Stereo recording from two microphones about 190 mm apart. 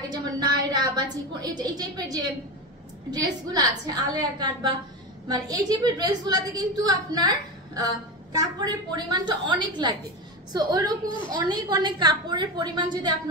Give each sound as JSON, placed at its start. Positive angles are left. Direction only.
{"t": 0.1, "sound": "a woman's voice", "side_deg": -20}